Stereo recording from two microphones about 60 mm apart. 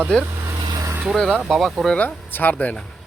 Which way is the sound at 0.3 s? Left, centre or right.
Right.